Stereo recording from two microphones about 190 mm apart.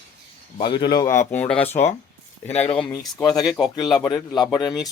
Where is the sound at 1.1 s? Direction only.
10° left (ahead or behind).